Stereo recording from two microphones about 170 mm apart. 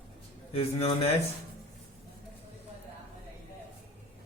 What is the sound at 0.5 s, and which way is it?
Speech, 40° left (ahead or behind).